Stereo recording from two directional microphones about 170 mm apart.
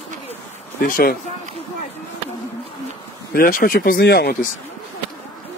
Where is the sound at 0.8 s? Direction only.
60° left (ahead or behind).